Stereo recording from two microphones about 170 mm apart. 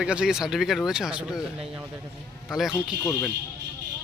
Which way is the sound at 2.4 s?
Centre (ahead or behind).